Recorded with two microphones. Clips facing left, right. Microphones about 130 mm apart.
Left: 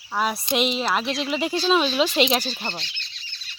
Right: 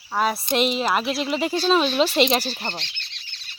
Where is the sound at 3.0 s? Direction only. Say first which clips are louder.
Even; 65° right (ahead or behind).